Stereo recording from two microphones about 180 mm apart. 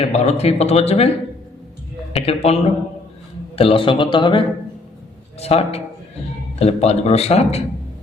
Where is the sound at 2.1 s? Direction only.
35° left (ahead or behind).